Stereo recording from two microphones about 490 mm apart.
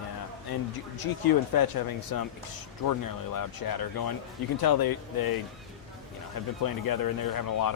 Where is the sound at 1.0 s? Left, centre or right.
Left.